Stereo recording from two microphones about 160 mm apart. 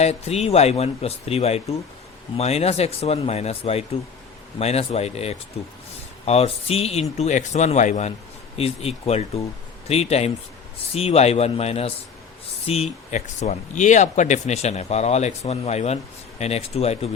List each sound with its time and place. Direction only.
0.0 s speech: 45° left (ahead or behind)